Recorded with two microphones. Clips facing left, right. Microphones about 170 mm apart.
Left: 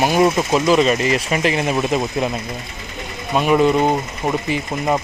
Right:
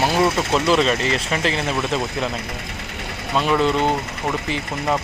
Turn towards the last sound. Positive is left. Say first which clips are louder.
# left 3 dB
turn(degrees=15)  # may be behind; listen again after turning